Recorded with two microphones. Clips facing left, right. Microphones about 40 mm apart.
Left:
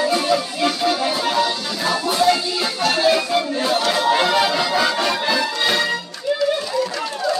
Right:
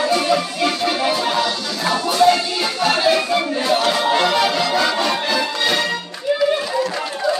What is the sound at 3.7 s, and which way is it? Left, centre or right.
Music, centre.